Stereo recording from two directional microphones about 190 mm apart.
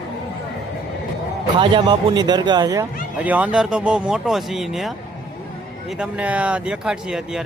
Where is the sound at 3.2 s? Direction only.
5° right (ahead or behind).